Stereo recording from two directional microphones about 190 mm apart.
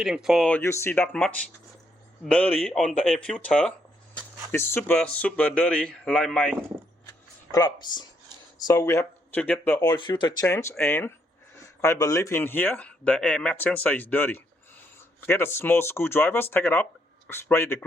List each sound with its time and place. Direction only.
0.0 s speech: 5° right (ahead or behind)
7.5 s speech: 20° left (ahead or behind)
9.9 s speech: 25° left (ahead or behind)